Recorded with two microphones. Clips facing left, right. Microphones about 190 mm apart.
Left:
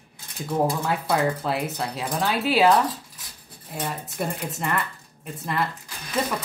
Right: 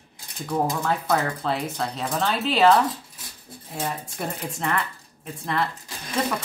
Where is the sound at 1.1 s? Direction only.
5° left (ahead or behind).